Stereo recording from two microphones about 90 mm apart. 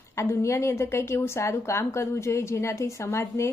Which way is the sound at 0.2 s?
35° left (ahead or behind).